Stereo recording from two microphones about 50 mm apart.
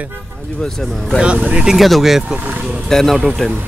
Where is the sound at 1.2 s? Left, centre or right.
Right.